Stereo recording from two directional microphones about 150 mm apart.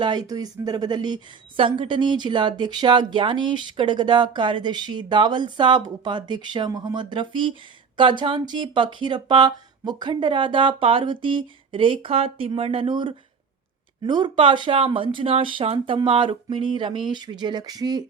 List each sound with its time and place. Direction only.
0.0 s a woman's voice: 30° right (ahead or behind)